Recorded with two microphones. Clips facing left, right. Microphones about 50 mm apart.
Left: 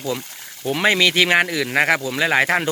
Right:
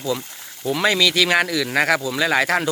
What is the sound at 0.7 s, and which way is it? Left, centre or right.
Speech, left.